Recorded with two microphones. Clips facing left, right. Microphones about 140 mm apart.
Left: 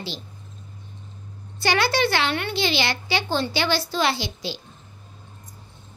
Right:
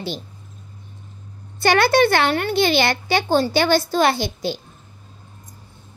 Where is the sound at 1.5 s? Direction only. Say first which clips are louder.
Right 6 dB; 55° right (ahead or behind).